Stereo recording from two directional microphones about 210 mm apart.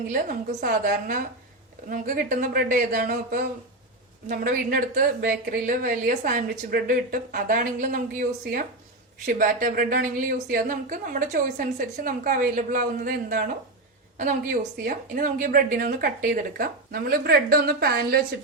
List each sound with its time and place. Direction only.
0.1 s a woman's voice: 40° right (ahead or behind)
9.2 s a woman's voice: 40° right (ahead or behind)
14.8 s a woman's voice: 40° right (ahead or behind)